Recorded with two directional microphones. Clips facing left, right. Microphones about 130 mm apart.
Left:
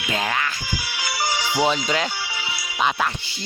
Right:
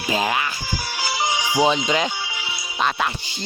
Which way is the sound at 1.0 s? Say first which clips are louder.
Right 2 dB; 25° right (ahead or behind).